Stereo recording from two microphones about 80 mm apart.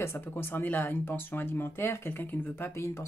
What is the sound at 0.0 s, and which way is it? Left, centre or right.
Speech, left.